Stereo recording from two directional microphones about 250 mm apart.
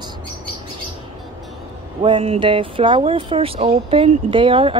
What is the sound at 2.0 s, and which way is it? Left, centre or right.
Speech, right.